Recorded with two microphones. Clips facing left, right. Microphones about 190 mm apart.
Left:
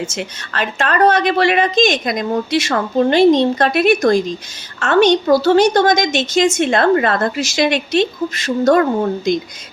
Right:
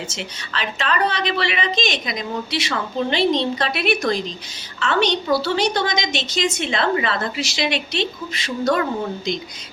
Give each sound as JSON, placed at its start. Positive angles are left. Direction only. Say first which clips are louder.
{"t": 0.1, "sound": "a woman's voice", "louder": "left 5 dB", "side_deg": 50}